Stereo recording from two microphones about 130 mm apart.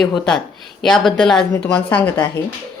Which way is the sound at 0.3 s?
5° left (ahead or behind).